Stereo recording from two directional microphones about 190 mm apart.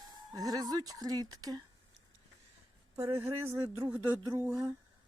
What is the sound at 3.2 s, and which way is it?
Speech, 15° right (ahead or behind).